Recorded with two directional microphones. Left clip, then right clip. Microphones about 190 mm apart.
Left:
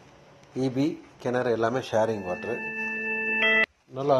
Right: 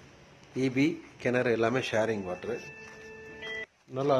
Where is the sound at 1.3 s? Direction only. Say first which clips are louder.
Left 2 dB; 30° right (ahead or behind).